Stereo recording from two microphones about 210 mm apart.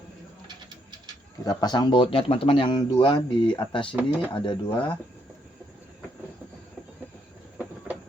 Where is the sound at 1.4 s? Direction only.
20° left (ahead or behind).